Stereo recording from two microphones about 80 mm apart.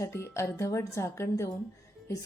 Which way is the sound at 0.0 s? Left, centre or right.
Left.